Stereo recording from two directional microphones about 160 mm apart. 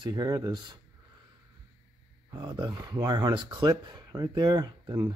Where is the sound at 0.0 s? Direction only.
25° right (ahead or behind).